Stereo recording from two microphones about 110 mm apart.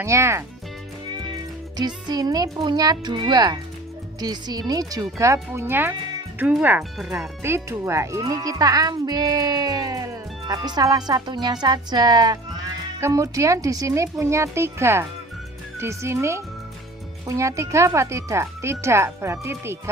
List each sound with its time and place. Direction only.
0.0 s speech: 25° right (ahead or behind)
1.7 s a child's voice: 40° right (ahead or behind); by 7.3 s 10° right (ahead or behind)
7.4 s a child's voice: 25° right (ahead or behind)